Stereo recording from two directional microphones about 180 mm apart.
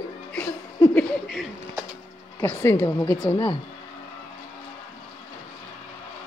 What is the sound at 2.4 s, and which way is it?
Speech, 10° left (ahead or behind).